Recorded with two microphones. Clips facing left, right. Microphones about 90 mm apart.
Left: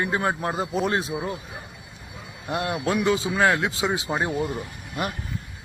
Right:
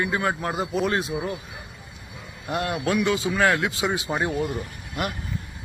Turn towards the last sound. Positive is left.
turn(degrees=25)  # may be behind; listen again after turning